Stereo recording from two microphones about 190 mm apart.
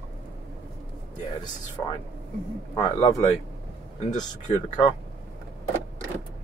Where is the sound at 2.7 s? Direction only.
20° left (ahead or behind).